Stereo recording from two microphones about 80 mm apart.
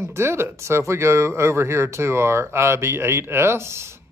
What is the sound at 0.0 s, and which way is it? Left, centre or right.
Speech, right.